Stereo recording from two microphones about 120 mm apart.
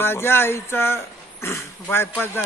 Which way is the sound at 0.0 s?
20° left (ahead or behind).